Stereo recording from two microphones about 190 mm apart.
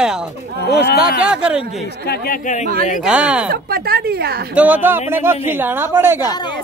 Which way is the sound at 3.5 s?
55° right (ahead or behind).